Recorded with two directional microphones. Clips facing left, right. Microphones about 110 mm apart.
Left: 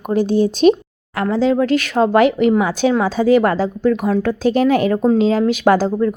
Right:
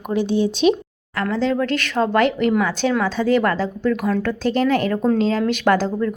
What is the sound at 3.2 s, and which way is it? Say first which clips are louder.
Speech: left 5 dB; 40° left (ahead or behind).